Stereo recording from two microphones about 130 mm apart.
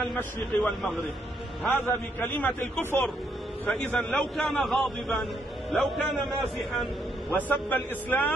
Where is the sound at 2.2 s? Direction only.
15° left (ahead or behind); by 6.0 s centre (ahead or behind).